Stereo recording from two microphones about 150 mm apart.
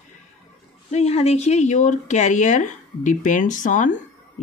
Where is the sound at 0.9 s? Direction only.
45° left (ahead or behind).